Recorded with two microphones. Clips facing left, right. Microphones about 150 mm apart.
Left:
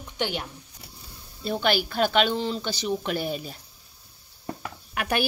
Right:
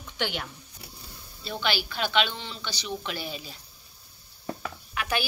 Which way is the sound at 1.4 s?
45° left (ahead or behind).